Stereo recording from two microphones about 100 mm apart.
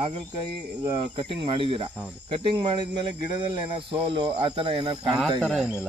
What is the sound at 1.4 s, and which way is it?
Speech, 65° right (ahead or behind).